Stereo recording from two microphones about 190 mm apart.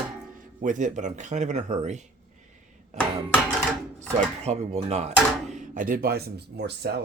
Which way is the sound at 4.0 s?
35° right (ahead or behind).